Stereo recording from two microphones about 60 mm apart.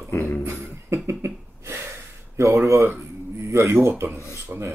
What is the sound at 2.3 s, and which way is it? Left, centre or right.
Speech, right.